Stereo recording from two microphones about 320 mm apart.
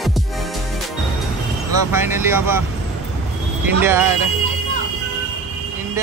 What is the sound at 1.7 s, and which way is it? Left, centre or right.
Speech, centre.